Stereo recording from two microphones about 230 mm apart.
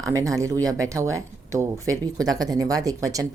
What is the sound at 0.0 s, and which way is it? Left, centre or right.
Speech, centre.